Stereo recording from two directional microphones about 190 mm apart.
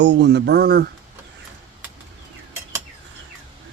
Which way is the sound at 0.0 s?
65° right (ahead or behind).